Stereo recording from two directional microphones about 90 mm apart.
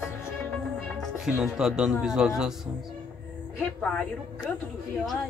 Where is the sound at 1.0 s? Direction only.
5° right (ahead or behind).